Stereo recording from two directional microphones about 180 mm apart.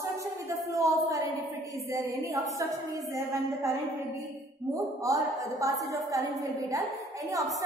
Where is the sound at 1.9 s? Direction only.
15° right (ahead or behind).